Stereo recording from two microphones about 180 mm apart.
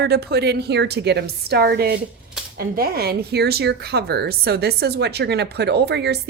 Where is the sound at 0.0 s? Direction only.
65° right (ahead or behind).